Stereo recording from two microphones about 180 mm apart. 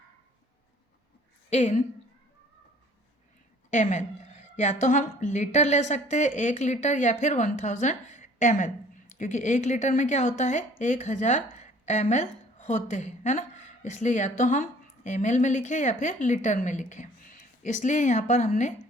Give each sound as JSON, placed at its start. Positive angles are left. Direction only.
{"t": 1.5, "sound": "a woman's voice", "side_deg": 40}
{"t": 3.7, "sound": "a woman's voice", "side_deg": 45}